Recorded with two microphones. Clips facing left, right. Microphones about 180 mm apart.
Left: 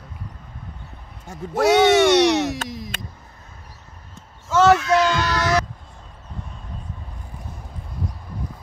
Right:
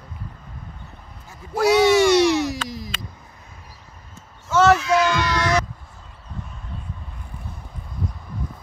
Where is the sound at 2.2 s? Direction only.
65° left (ahead or behind).